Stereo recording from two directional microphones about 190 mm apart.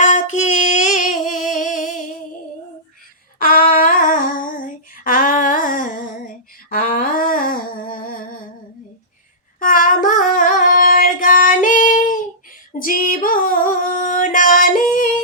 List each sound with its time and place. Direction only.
0.0 s singing: 40° left (ahead or behind)
3.3 s humming: 50° left (ahead or behind)
9.6 s a sound: 45° left (ahead or behind)
12.8 s female singing: 45° left (ahead or behind)